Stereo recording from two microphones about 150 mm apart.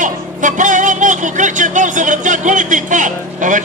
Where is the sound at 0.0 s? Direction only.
60° right (ahead or behind).